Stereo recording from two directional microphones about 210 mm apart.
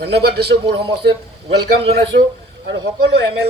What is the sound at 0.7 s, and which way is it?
Speech, 25° right (ahead or behind).